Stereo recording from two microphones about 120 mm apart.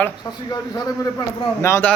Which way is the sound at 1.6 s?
25° left (ahead or behind).